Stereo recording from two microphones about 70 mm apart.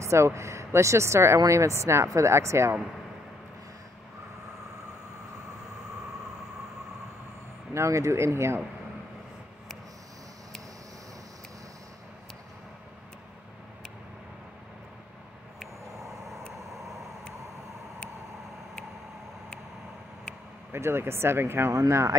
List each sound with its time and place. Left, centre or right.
0.0 s speech: right
7.7 s speech: right
15.8 s vehicle: right
20.7 s speech: right